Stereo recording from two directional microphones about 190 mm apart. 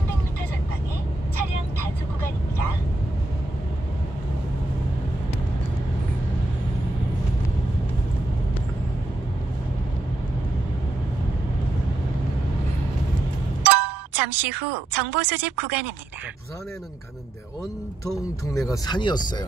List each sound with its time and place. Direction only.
13.6 s speech: 10° right (ahead or behind)
18.5 s speech: 15° left (ahead or behind)